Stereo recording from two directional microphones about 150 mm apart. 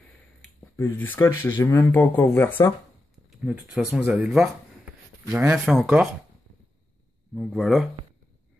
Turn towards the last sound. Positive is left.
turn(degrees=0)  # may be behind; listen again after turning